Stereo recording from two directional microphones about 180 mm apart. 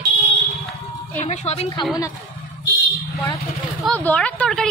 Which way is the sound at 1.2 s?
35° left (ahead or behind).